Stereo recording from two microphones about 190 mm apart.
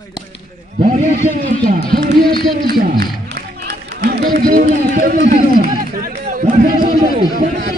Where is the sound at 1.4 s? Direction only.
45° right (ahead or behind).